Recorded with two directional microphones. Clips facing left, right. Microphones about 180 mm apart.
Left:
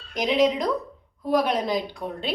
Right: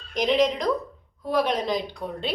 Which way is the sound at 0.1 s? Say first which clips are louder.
Even; 5° left (ahead or behind).